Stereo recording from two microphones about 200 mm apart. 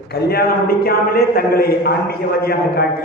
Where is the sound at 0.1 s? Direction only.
50° left (ahead or behind).